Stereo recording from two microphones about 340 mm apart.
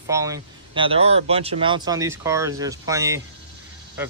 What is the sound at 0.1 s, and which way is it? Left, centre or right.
Speech, centre.